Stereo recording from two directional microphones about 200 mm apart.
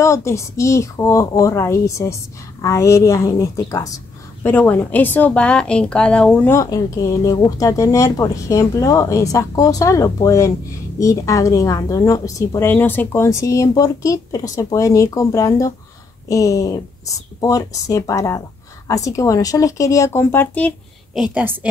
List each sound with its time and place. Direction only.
0.0 s a woman's voice: 15° left (ahead or behind); by 21.5 s 5° right (ahead or behind)